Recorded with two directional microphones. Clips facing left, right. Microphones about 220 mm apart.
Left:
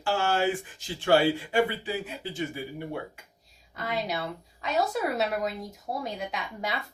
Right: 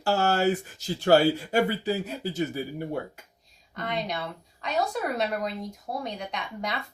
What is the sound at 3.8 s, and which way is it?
Speech, 5° left (ahead or behind).